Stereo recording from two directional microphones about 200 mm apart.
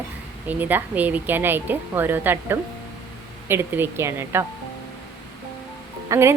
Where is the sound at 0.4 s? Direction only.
10° right (ahead or behind).